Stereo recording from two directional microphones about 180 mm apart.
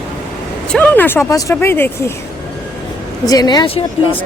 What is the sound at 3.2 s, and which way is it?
Speech, 20° left (ahead or behind).